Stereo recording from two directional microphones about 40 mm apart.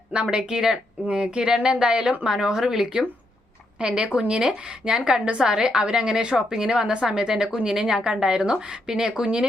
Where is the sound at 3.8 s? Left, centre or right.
Right.